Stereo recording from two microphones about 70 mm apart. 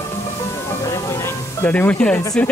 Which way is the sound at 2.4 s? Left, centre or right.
Centre.